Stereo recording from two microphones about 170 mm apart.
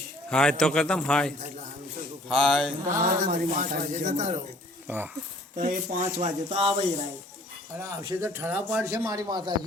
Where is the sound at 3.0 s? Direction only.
50° right (ahead or behind).